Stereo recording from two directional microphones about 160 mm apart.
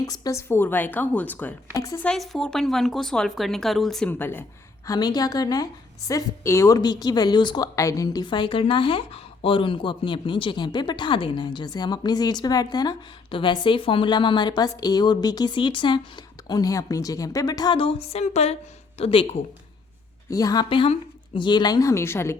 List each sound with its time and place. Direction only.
0.0 s a woman's voice: 20° left (ahead or behind)
2.0 s speech: centre (ahead or behind)
4.9 s a woman's voice: 25° left (ahead or behind)
20.3 s a woman's voice: 25° left (ahead or behind)